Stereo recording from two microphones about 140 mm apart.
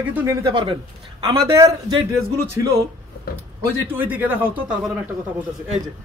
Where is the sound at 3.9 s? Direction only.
10° right (ahead or behind).